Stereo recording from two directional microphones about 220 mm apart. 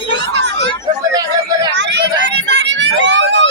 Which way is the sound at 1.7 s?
55° right (ahead or behind).